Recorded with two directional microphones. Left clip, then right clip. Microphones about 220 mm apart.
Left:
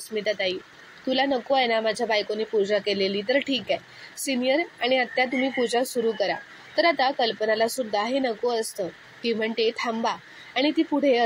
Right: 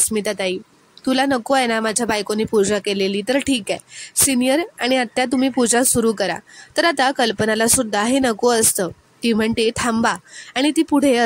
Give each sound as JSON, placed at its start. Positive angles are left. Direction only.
{"t": 0.1, "sound": "speech", "side_deg": -55}